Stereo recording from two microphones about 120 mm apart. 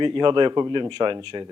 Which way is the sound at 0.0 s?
40° right (ahead or behind).